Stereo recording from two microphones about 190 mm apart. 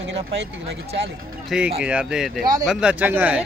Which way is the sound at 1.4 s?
5° right (ahead or behind).